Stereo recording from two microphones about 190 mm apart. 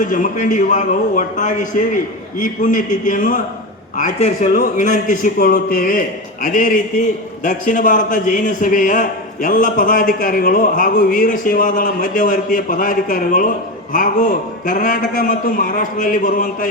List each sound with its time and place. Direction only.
0.0 s a man's voice: 40° left (ahead or behind)